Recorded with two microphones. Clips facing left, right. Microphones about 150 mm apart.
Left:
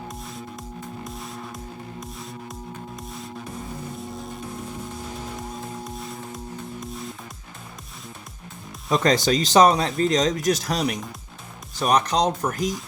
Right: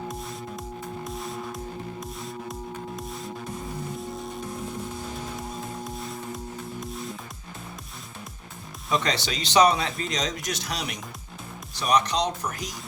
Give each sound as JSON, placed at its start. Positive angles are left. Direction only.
{"t": 1.0, "sound": "music", "side_deg": 0}
{"t": 5.4, "sound": "music", "side_deg": 0}
{"t": 8.9, "sound": "speech", "side_deg": 45}